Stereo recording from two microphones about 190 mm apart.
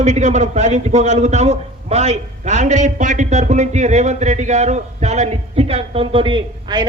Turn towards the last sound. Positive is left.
turn(degrees=-25)  # may be behind; listen again after turning